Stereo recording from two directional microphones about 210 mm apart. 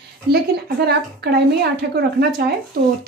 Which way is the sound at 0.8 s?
50° right (ahead or behind).